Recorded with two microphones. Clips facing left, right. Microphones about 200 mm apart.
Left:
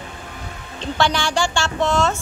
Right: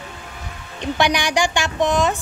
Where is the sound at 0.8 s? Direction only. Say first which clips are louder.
Right 1 dB; 15° right (ahead or behind).